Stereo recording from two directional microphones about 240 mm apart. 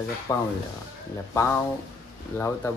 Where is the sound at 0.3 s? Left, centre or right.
Centre.